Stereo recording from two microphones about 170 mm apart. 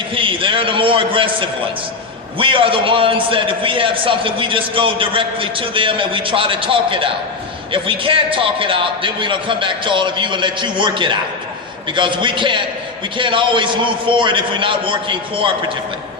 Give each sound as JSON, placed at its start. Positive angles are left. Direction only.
{"t": 0.1, "sound": "a man's voice", "side_deg": -30}